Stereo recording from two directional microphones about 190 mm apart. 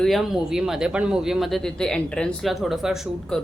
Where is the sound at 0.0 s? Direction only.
Centre (ahead or behind).